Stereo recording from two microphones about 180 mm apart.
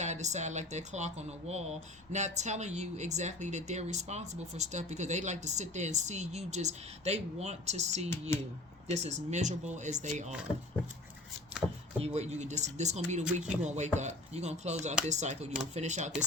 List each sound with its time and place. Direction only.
0.0 s speech: 40° right (ahead or behind)
11.9 s speech: 35° right (ahead or behind)